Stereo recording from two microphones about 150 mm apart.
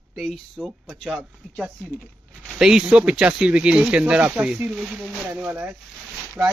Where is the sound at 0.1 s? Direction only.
Centre (ahead or behind).